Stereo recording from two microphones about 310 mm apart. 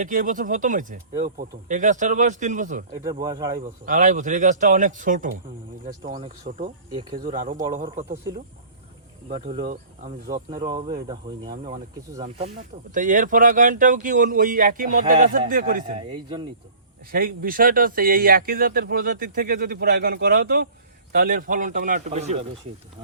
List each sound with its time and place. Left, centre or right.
0.0 s speech: right
3.0 s speech: centre
3.8 s speech: right
9.3 s speech: centre
17.1 s speech: right